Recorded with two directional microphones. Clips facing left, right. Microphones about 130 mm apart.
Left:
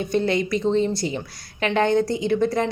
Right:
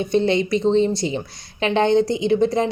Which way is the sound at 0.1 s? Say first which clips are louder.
Right 3 dB; 20° right (ahead or behind).